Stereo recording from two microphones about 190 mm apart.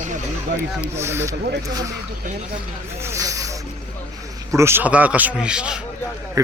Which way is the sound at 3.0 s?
15° right (ahead or behind).